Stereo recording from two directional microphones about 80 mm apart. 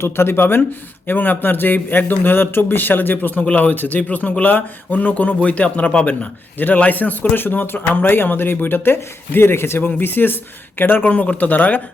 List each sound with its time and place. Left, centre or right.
0.0 s a man's voice: left